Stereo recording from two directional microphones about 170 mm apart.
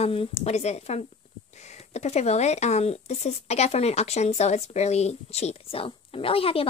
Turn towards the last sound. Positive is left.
turn(degrees=35)  # may be behind; listen again after turning